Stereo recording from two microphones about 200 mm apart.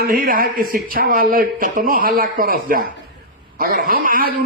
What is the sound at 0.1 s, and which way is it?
A man's voice, 45° right (ahead or behind).